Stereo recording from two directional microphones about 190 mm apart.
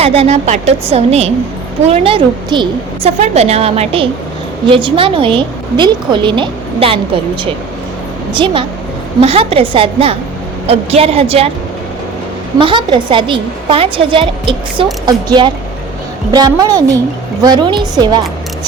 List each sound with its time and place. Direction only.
0.0 s a woman's voice: 30° right (ahead or behind)
9.2 s a woman's voice: 30° right (ahead or behind)
12.5 s a woman's voice: 25° right (ahead or behind)